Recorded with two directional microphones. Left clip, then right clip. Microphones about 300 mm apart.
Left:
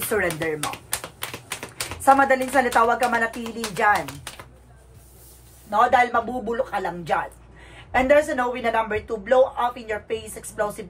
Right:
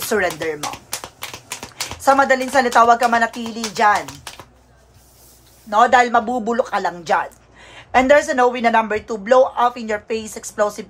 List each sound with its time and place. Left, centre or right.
0.1 s a woman's voice: centre
2.0 s a woman's voice: centre
5.7 s a woman's voice: centre